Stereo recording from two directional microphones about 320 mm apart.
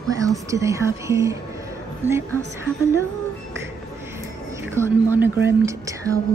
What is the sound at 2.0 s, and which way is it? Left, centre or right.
Speech, centre.